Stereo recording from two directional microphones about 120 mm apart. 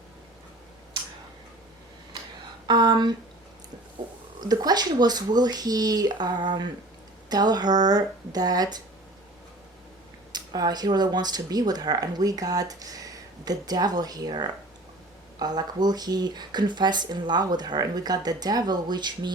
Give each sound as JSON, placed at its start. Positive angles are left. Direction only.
{"t": 2.6, "sound": "speech", "side_deg": -35}
{"t": 4.0, "sound": "a sound", "side_deg": -35}
{"t": 4.4, "sound": "speech", "side_deg": -35}
{"t": 10.3, "sound": "speech", "side_deg": -35}